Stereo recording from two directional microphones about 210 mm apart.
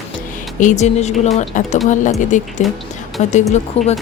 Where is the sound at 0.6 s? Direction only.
35° left (ahead or behind).